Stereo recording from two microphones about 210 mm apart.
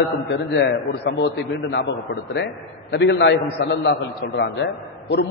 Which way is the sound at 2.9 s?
60° left (ahead or behind).